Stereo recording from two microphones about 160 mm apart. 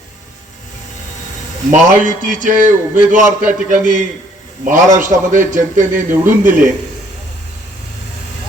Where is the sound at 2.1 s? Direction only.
55° right (ahead or behind).